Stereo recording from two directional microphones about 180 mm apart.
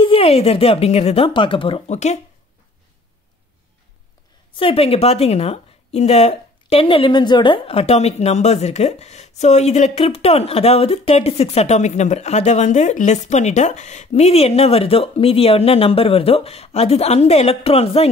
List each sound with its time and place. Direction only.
0.0 s a woman's voice: 30° left (ahead or behind)
4.6 s a woman's voice: 30° left (ahead or behind)